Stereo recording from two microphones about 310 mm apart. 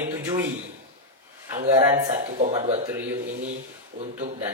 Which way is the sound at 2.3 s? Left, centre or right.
Right.